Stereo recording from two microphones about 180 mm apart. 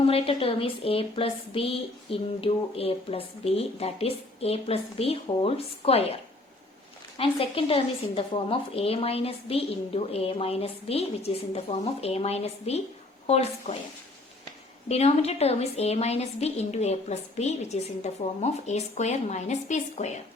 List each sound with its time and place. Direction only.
0.1 s a woman's voice: 30° left (ahead or behind)
7.2 s a woman's voice: 30° left (ahead or behind)
14.8 s a woman's voice: 35° left (ahead or behind)